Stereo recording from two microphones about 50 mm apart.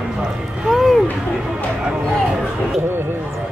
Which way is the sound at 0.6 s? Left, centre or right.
Centre.